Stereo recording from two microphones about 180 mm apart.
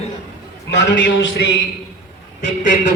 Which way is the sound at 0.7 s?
80° left.